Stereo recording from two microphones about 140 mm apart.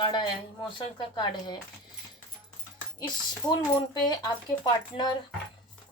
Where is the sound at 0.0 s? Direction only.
30° left (ahead or behind).